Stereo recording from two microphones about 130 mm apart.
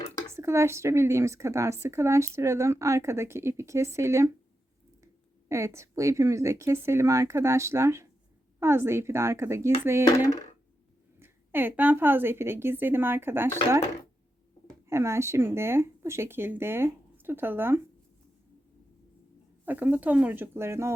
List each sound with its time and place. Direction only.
0.3 s speech: 20° right (ahead or behind)
5.5 s speech: 20° right (ahead or behind)
11.2 s speech: 15° right (ahead or behind)
14.8 s speech: 20° right (ahead or behind)
19.6 s speech: 15° right (ahead or behind)